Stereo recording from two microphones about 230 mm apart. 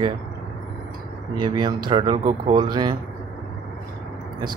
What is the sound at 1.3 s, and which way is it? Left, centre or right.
Speech, centre.